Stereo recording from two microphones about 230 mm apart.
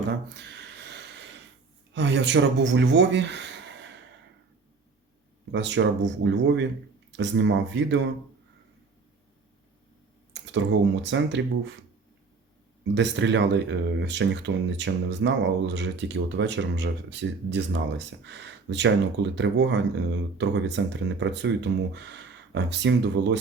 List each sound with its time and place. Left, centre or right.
0.3 s a sound: right
2.0 s speech: right
5.5 s speech: right
10.3 s speech: right
12.9 s speech: right